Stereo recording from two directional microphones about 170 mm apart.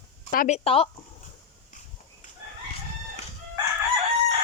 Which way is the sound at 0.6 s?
35° left (ahead or behind).